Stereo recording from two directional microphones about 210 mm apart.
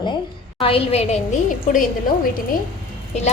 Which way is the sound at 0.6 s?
25° left (ahead or behind).